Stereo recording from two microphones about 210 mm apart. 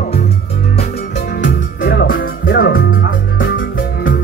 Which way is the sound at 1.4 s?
55° left (ahead or behind).